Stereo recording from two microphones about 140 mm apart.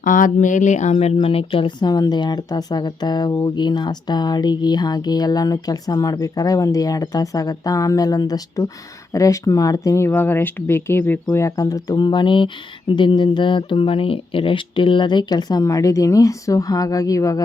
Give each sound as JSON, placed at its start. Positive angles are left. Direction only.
{"t": 0.0, "sound": "speech", "side_deg": 70}